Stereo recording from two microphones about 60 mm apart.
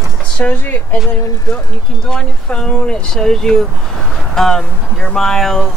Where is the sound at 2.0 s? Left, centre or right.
Centre.